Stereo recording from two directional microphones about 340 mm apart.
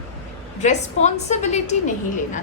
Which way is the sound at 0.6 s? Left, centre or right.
Left.